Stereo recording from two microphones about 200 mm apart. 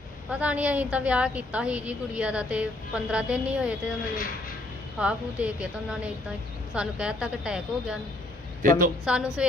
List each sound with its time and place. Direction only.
0.3 s a woman's voice: 5° right (ahead or behind)
4.9 s a woman's voice: 5° right (ahead or behind)
8.6 s a woman's voice: 45° right (ahead or behind)
9.0 s a woman's voice: 5° right (ahead or behind)